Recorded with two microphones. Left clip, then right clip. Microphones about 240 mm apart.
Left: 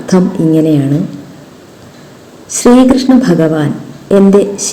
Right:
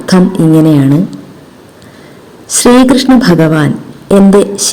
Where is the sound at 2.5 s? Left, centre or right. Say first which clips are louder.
Right 1 dB; right.